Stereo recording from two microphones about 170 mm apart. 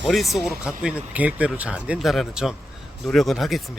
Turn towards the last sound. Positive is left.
turn(degrees=0)  # may be behind; listen again after turning